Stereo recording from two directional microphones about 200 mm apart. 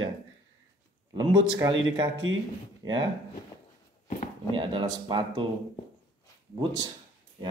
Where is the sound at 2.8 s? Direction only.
15° right (ahead or behind).